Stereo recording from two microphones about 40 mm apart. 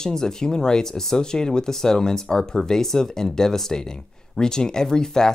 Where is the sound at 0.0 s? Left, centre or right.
Centre.